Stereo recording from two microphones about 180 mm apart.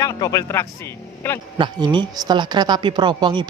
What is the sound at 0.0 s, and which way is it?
Speech, 20° left (ahead or behind).